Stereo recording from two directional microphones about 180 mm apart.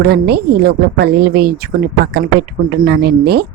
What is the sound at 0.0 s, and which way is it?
Speech, 60° right (ahead or behind).